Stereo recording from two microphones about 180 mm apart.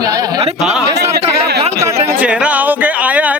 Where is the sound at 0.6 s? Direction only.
5° right (ahead or behind).